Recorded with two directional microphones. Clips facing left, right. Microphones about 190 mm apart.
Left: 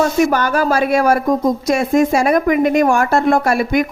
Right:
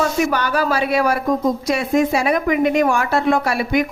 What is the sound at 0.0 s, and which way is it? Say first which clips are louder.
A woman's voice: left 4 dB; 45° left (ahead or behind).